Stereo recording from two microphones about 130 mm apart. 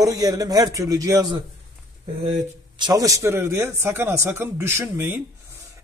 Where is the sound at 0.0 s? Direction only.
30° right (ahead or behind).